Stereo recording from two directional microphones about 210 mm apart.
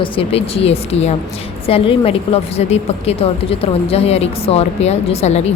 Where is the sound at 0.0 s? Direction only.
25° left (ahead or behind).